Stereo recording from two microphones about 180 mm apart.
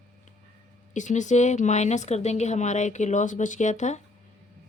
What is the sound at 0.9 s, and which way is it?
Speech, 45° left (ahead or behind).